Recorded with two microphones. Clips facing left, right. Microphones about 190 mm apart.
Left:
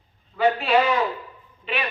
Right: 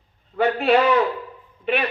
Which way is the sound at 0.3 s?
60° right (ahead or behind).